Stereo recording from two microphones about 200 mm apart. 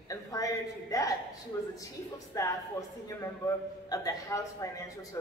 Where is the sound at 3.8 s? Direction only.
20° left (ahead or behind).